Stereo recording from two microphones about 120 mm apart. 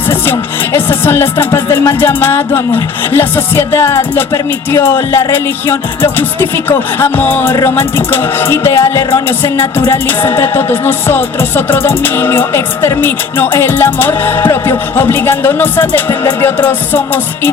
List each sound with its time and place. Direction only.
0.1 s music: 20° left (ahead or behind)